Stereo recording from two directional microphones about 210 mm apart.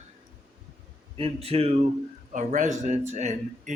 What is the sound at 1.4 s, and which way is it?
A man's voice, 30° right (ahead or behind).